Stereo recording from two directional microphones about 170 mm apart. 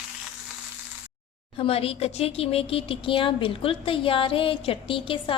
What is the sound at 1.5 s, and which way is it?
Speech, 35° left (ahead or behind).